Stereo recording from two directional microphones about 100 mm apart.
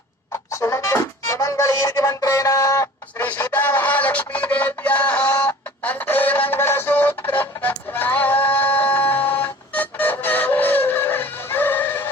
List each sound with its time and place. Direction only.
0.5 s music: 30° left (ahead or behind)
3.2 s a sound: 15° left (ahead or behind)
5.8 s music: 15° left (ahead or behind)